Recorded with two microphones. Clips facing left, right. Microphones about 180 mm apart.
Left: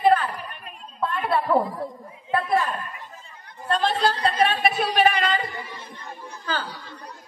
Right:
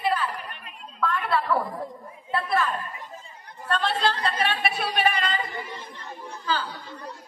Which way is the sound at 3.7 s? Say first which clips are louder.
Left 3 dB; 40° left (ahead or behind).